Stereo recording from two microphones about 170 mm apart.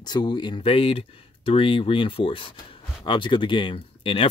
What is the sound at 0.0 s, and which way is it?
Speech, 25° left (ahead or behind).